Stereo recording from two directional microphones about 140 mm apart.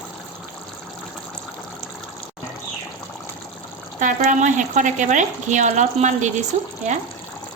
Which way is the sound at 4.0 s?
60° right (ahead or behind).